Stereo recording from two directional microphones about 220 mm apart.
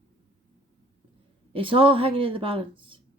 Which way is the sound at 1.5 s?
25° right (ahead or behind).